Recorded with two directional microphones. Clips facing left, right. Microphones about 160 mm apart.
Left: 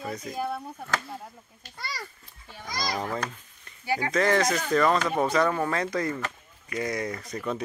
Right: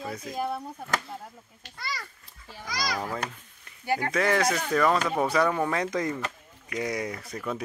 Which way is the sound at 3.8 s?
50° right (ahead or behind).